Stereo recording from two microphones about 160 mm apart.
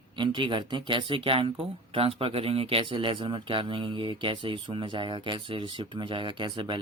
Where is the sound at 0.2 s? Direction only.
30° right (ahead or behind).